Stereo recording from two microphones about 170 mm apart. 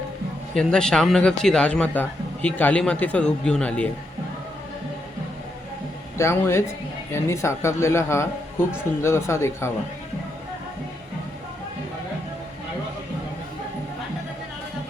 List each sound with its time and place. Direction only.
0.5 s speech: 5° left (ahead or behind)
6.1 s speech: 15° left (ahead or behind)